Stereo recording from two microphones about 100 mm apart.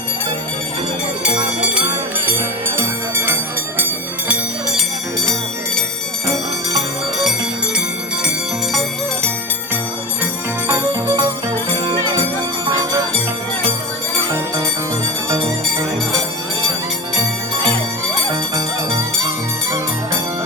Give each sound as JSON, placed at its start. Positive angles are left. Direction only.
{"t": 2.7, "sound": "music", "side_deg": -20}
{"t": 6.7, "sound": "music", "side_deg": 0}
{"t": 10.7, "sound": "music", "side_deg": -30}
{"t": 18.5, "sound": "music", "side_deg": -35}